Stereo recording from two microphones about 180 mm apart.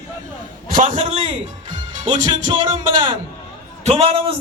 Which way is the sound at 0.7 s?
45° right (ahead or behind).